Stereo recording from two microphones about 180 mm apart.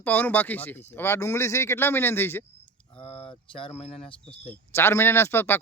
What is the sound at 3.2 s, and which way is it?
Speech, 30° left (ahead or behind).